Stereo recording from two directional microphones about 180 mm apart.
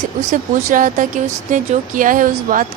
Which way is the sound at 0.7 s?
45° right (ahead or behind).